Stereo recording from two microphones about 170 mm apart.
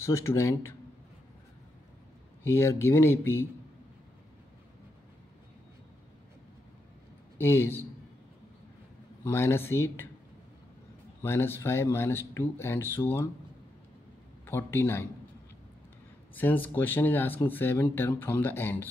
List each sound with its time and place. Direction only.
0.0 s speech: 15° left (ahead or behind)
2.4 s speech: 15° left (ahead or behind)
7.3 s speech: 15° left (ahead or behind)
9.2 s speech: 15° left (ahead or behind)
11.2 s speech: 15° left (ahead or behind)
14.4 s speech: 15° left (ahead or behind)
16.3 s speech: 10° left (ahead or behind)